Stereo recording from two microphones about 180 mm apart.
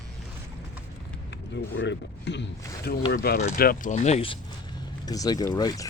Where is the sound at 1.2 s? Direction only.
75° left (ahead or behind).